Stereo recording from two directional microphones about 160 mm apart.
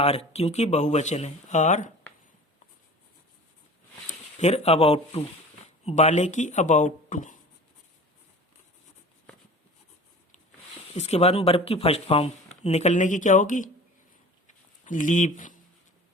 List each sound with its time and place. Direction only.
0.0 s speech: 40° left (ahead or behind)
4.0 s speech: 45° left (ahead or behind)
10.9 s speech: 40° left (ahead or behind)
14.4 s a sound: 55° left (ahead or behind)